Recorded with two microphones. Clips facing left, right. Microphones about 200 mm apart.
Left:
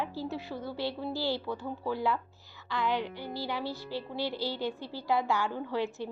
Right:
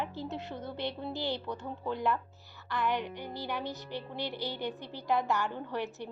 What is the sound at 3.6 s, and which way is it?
Speech, 20° right (ahead or behind).